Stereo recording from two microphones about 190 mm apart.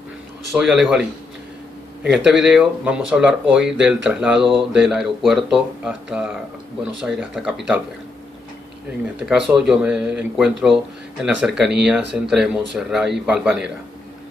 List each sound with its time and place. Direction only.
0.5 s speech: centre (ahead or behind)
2.0 s speech: 5° right (ahead or behind)
9.2 s speech: 5° right (ahead or behind)